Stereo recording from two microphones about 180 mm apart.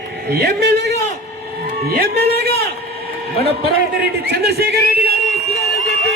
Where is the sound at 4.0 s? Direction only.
65° right (ahead or behind).